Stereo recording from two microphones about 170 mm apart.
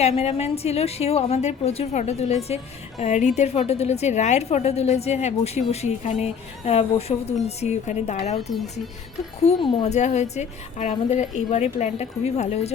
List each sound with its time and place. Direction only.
0.0 s a woman's voice: 40° left (ahead or behind)
9.4 s a woman's voice: 35° left (ahead or behind)